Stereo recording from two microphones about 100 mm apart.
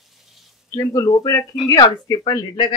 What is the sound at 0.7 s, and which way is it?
Speech, 30° left (ahead or behind).